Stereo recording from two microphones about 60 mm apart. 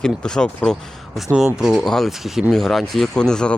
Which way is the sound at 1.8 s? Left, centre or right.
Centre.